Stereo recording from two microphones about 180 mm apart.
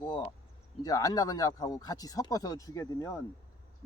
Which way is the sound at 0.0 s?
25° left (ahead or behind).